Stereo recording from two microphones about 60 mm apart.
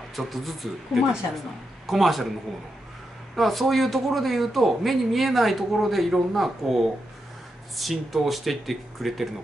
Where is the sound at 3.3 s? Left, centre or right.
Centre.